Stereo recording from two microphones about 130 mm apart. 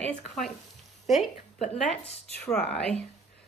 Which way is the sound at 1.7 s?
50° left (ahead or behind).